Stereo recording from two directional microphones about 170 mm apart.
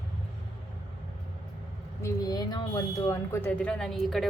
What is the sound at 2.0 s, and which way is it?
A woman's voice, 20° left (ahead or behind).